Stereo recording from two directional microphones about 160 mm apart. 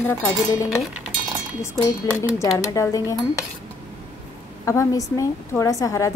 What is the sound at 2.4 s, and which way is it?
Speech, 20° left (ahead or behind).